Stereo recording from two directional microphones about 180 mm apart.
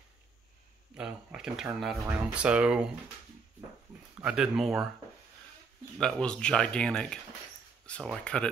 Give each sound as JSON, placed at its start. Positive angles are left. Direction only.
{"t": 0.9, "sound": "speech", "side_deg": -5}
{"t": 4.2, "sound": "speech", "side_deg": -5}
{"t": 5.9, "sound": "speech", "side_deg": 5}